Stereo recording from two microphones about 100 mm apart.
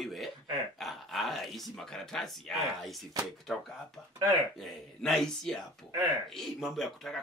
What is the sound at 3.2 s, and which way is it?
Speech, 35° right (ahead or behind).